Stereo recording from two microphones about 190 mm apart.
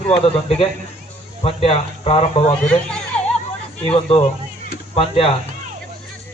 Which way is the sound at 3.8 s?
30° left (ahead or behind).